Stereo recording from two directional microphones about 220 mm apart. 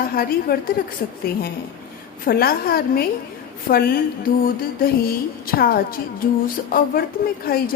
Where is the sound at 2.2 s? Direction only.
45° left (ahead or behind).